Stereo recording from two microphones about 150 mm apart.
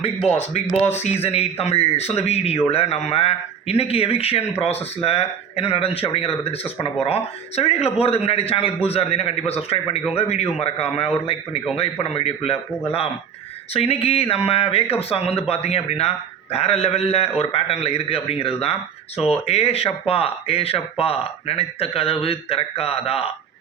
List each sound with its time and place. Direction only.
0.3 s a man's voice: 45° left (ahead or behind)
13.7 s speech: 40° left (ahead or behind)